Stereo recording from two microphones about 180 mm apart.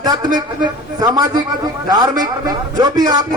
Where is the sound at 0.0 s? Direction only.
25° right (ahead or behind).